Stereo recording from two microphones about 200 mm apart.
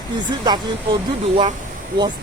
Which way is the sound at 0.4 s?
20° right (ahead or behind).